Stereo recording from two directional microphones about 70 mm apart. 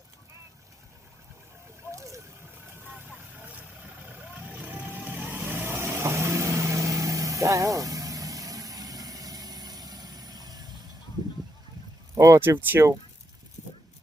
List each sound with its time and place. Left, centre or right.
1.9 s slosh: right
4.5 s vehicle: right
12.1 s a sound: right
12.4 s speech: right